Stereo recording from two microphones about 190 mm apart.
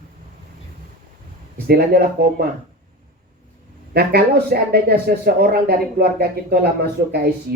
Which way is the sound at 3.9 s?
55° right (ahead or behind).